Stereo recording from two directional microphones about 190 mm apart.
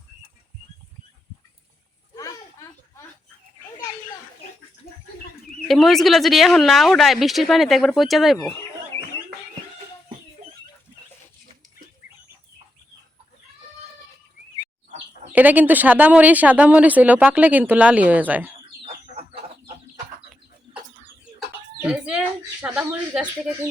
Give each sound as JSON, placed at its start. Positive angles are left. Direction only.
{"t": 2.1, "sound": "a sound", "side_deg": 15}
{"t": 5.6, "sound": "speech", "side_deg": 0}
{"t": 15.3, "sound": "speech", "side_deg": -10}
{"t": 18.8, "sound": "a sound", "side_deg": -30}
{"t": 21.3, "sound": "chicken", "side_deg": -5}
{"t": 22.6, "sound": "speech", "side_deg": -10}